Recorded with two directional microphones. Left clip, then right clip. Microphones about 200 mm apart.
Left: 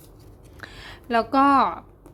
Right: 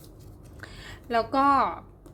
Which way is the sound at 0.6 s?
10° left (ahead or behind).